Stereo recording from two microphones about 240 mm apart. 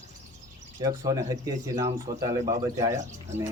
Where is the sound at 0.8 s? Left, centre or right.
Centre.